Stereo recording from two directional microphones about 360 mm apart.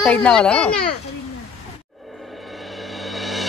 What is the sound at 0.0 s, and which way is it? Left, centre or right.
Speech, centre.